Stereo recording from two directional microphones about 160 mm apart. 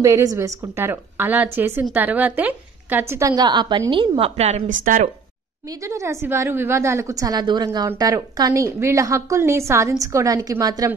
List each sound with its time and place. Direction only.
0.0 s a woman's voice: 20° right (ahead or behind); by 5.1 s 55° right (ahead or behind)
5.7 s a woman's voice: 20° right (ahead or behind)